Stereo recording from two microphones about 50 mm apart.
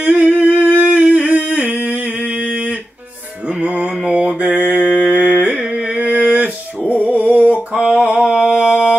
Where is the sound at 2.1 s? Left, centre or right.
Right.